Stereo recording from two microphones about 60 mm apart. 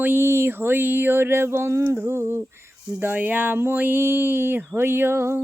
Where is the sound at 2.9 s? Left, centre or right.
Right.